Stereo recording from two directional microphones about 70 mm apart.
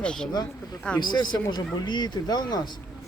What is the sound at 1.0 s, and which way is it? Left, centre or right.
Speech, left.